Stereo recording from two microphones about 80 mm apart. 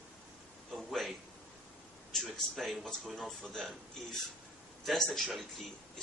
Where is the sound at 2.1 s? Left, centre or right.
Centre.